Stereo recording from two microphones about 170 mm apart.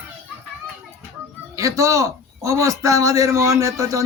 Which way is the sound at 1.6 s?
20° right (ahead or behind).